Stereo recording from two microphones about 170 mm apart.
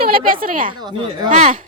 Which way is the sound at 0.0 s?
60° right (ahead or behind).